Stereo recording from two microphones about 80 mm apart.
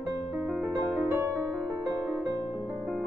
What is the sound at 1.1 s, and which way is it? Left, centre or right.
Music, right.